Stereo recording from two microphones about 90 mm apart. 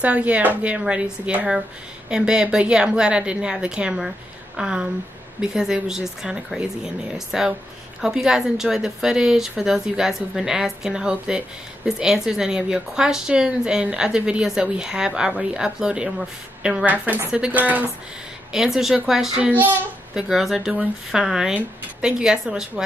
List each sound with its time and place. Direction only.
0.0 s a woman's voice: 15° right (ahead or behind)
18.5 s speech: 5° right (ahead or behind)
19.5 s a child's voice: 20° right (ahead or behind)
20.2 s a woman's voice: 5° right (ahead or behind)